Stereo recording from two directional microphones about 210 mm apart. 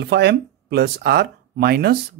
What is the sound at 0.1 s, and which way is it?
Speech, 50° right (ahead or behind).